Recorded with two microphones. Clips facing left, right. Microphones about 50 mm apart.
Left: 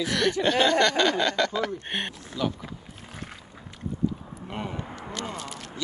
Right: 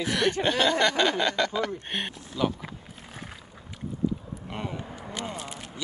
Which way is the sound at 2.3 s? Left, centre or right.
Centre.